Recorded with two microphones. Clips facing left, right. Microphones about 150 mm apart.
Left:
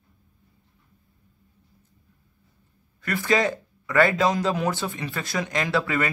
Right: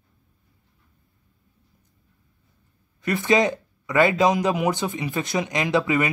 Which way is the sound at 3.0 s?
20° right (ahead or behind).